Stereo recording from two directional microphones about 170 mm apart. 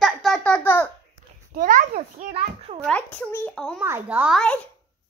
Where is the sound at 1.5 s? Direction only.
55° right (ahead or behind); by 2.8 s 35° right (ahead or behind).